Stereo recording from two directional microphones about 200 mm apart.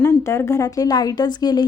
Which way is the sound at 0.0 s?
15° left (ahead or behind).